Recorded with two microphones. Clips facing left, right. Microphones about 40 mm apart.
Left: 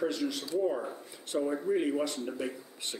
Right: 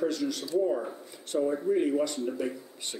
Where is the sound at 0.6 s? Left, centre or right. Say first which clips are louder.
Right 2 dB; centre.